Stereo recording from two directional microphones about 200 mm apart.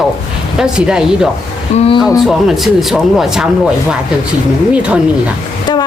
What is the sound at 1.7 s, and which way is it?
Speech, 35° left (ahead or behind).